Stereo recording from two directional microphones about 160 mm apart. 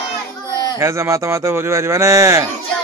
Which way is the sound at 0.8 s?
15° right (ahead or behind).